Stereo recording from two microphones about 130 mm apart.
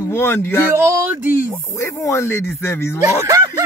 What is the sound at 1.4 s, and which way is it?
Speech, 25° left (ahead or behind).